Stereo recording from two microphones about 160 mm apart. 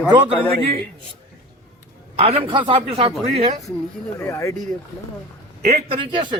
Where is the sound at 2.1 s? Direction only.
40° right (ahead or behind).